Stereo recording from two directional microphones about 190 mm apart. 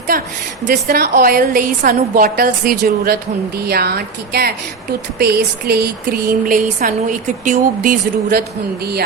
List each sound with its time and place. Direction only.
0.1 s a woman's voice: 50° right (ahead or behind)
0.6 s a woman's voice: 60° right (ahead or behind)